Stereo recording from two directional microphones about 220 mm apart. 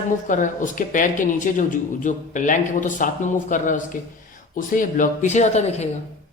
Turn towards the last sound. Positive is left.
turn(degrees=30)  # may be behind; listen again after turning